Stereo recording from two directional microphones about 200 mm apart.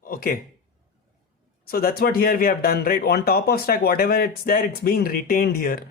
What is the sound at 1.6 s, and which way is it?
Speech, 45° left (ahead or behind).